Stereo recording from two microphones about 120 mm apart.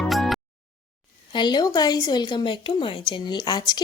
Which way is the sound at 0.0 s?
Centre (ahead or behind).